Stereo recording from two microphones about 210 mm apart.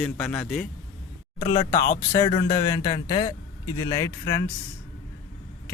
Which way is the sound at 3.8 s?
20° left (ahead or behind).